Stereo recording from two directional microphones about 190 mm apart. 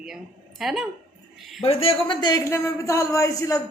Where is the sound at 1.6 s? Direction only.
30° left (ahead or behind).